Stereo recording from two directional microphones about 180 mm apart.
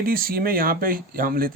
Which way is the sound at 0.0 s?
55° right (ahead or behind).